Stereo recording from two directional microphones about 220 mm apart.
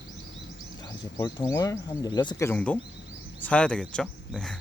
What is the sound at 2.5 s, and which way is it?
Speech, 5° left (ahead or behind).